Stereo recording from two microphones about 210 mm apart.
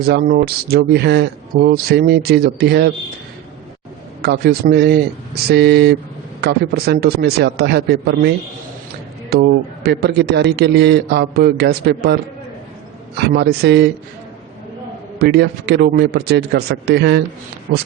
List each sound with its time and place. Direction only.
0.0 s a man's voice: 50° right (ahead or behind)
4.2 s a man's voice: 50° right (ahead or behind)
9.3 s a man's voice: 55° right (ahead or behind)
13.1 s a man's voice: 50° right (ahead or behind)
15.2 s a man's voice: 50° right (ahead or behind)